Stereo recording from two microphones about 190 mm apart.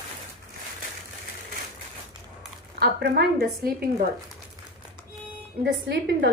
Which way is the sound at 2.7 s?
55° right (ahead or behind).